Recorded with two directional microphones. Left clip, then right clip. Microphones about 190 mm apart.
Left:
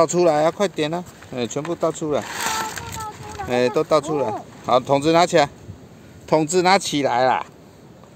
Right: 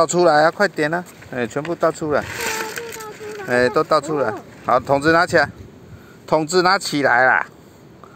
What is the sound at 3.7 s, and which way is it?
Speech, centre (ahead or behind).